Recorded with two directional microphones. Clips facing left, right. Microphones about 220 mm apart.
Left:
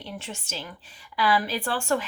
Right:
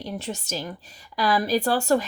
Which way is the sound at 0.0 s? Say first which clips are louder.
Right 6 dB; 40° right (ahead or behind).